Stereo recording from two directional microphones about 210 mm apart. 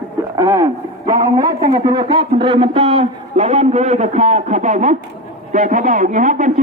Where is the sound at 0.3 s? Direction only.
15° right (ahead or behind).